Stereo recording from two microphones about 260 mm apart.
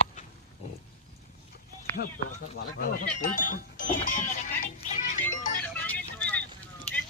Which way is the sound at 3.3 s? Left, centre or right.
Left.